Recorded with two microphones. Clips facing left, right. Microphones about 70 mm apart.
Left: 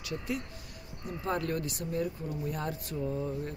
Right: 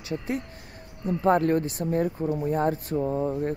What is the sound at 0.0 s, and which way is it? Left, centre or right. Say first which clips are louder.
Speech: right 6 dB; right.